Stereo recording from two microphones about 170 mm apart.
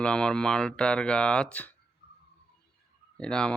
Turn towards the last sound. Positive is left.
turn(degrees=5)  # may be behind; listen again after turning